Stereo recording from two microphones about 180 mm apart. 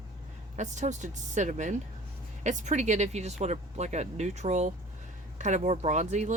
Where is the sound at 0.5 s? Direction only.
40° right (ahead or behind).